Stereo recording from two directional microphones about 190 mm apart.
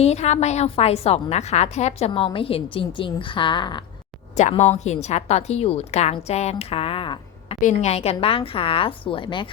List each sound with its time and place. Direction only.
0.0 s a woman's voice: 35° left (ahead or behind)
4.4 s a woman's voice: 40° left (ahead or behind)
7.6 s a woman's voice: 40° left (ahead or behind)